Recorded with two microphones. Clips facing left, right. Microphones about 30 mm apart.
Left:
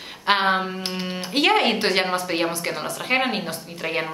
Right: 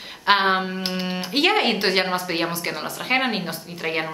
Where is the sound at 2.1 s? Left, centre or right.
Centre.